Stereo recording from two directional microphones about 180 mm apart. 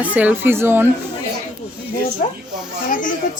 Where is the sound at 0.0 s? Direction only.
10° right (ahead or behind).